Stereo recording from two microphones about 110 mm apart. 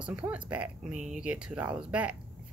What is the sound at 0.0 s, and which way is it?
Speech, 10° right (ahead or behind).